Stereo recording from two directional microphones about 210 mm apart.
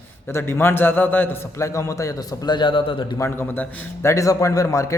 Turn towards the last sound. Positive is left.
turn(degrees=15)  # may be behind; listen again after turning